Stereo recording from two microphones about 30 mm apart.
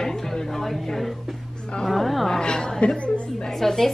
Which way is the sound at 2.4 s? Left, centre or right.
Left.